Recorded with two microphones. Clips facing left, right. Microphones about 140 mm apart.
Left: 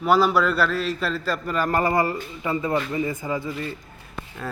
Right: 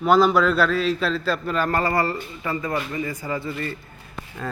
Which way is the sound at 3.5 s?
5° left (ahead or behind).